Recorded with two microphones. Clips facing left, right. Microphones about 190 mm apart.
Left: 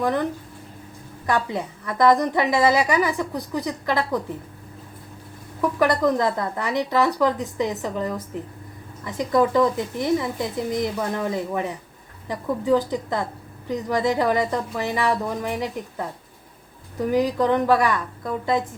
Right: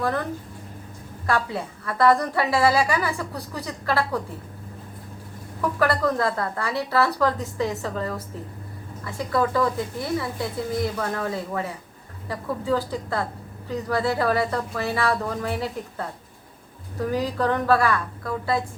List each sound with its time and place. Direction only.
0.0 s a woman's voice: 15° left (ahead or behind)
1.3 s a woman's voice: 15° left (ahead or behind)
5.8 s a woman's voice: 15° left (ahead or behind)